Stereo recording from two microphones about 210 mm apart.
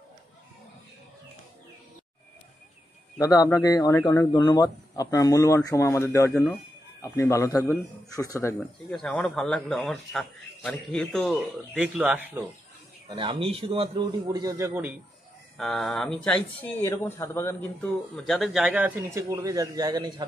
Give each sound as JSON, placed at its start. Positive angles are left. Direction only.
{"t": 3.2, "sound": "a man's voice", "side_deg": 15}
{"t": 13.1, "sound": "a man's voice", "side_deg": -25}
{"t": 15.5, "sound": "a man's voice", "side_deg": 0}
{"t": 18.1, "sound": "a man's voice", "side_deg": 0}